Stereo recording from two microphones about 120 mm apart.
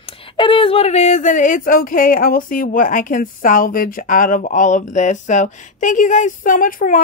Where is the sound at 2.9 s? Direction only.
90° left.